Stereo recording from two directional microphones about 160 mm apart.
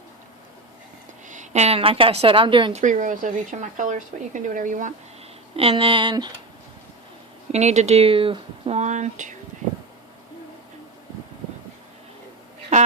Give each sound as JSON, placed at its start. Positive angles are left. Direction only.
{"t": 1.3, "sound": "speech", "side_deg": -45}
{"t": 2.7, "sound": "a woman's voice", "side_deg": -55}
{"t": 5.5, "sound": "speech", "side_deg": -35}
{"t": 7.5, "sound": "a woman's voice", "side_deg": -45}